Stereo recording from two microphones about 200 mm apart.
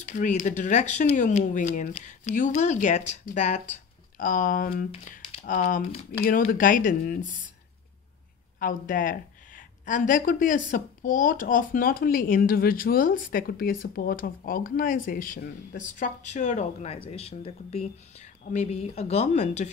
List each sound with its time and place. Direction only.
0.0 s speech: 40° left (ahead or behind)
8.5 s speech: 45° left (ahead or behind)